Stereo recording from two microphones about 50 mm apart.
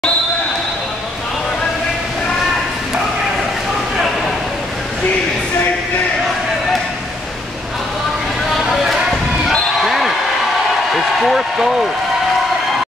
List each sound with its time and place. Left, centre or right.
8.5 s a sound: centre
9.8 s basketball bounce: centre
10.9 s speech: centre